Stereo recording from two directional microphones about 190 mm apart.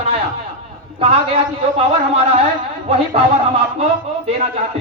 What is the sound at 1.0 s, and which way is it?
A man's voice, 30° right (ahead or behind).